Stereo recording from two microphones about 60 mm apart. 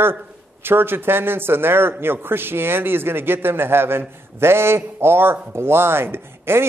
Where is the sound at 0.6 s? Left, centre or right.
Right.